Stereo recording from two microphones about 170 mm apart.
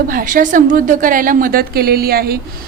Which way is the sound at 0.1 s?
55° right (ahead or behind).